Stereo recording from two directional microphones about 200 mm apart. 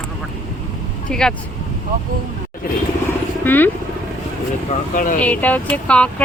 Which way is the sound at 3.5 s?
10° left (ahead or behind).